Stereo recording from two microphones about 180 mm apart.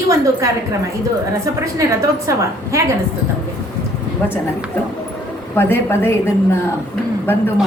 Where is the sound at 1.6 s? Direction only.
20° right (ahead or behind).